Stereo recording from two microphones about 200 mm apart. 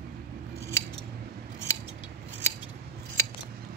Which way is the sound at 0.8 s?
15° left (ahead or behind).